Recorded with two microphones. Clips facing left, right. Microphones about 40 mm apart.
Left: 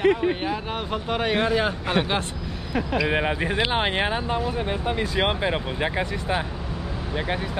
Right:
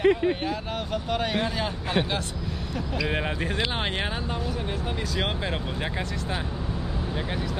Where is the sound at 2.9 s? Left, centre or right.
Centre.